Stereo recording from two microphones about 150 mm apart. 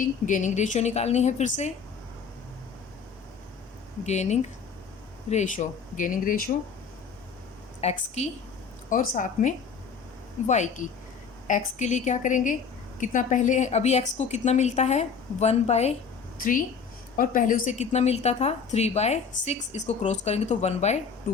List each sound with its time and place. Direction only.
0.3 s a woman's voice: 55° left (ahead or behind)
4.0 s a woman's voice: 50° left (ahead or behind)
7.8 s a woman's voice: 45° left (ahead or behind)
8.9 s a woman's voice: 60° left (ahead or behind)
16.4 s a woman's voice: 65° left (ahead or behind); by 21.0 s 50° left (ahead or behind)